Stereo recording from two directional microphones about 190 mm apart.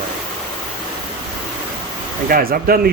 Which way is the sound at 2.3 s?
50° right (ahead or behind).